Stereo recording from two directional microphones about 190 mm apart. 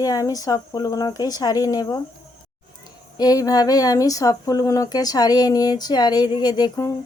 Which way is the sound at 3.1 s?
20° left (ahead or behind).